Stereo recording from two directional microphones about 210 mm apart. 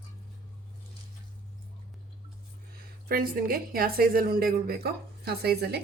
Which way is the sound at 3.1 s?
45° right (ahead or behind).